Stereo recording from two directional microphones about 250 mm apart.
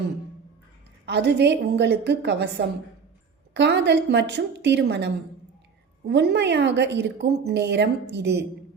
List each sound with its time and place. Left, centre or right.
1.0 s a woman's voice: right